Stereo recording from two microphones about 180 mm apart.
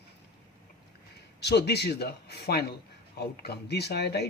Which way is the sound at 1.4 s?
65° left (ahead or behind).